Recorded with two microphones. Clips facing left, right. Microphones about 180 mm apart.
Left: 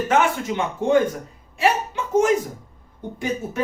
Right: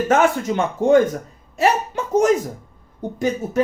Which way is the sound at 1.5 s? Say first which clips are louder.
Right 2 dB; 40° right (ahead or behind).